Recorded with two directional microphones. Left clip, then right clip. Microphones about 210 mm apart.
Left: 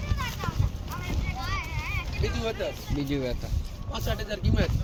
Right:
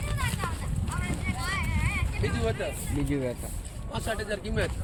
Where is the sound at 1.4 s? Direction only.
55° right (ahead or behind).